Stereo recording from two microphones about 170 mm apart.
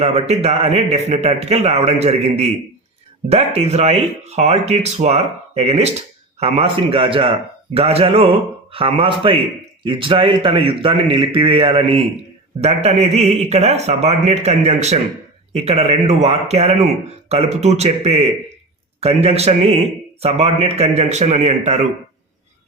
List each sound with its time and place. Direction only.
0.0 s speech: 40° right (ahead or behind)